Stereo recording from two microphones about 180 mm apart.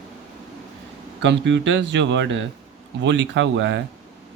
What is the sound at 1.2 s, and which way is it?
Speech, 85° right.